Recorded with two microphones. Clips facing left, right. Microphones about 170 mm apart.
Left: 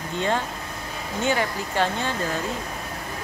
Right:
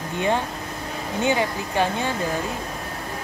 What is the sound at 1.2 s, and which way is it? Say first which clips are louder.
Speech: right 2 dB; 15° right (ahead or behind).